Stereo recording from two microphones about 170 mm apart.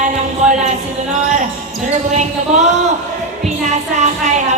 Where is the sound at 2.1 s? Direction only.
40° right (ahead or behind).